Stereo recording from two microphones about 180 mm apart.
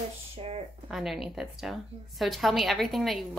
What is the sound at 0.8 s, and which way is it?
A woman's voice, centre (ahead or behind).